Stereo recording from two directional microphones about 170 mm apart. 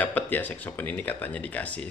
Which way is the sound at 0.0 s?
10° left (ahead or behind).